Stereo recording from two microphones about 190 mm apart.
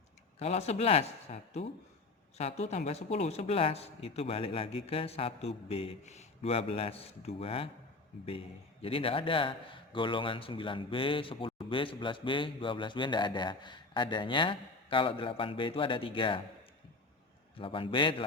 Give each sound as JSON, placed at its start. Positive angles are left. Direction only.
{"t": 0.3, "sound": "speech", "side_deg": 35}
{"t": 8.8, "sound": "a man's voice", "side_deg": 30}
{"t": 17.6, "sound": "a man's voice", "side_deg": 30}